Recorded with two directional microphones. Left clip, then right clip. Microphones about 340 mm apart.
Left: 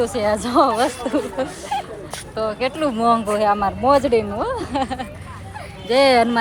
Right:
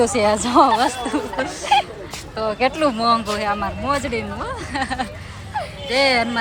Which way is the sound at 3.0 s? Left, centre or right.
Centre.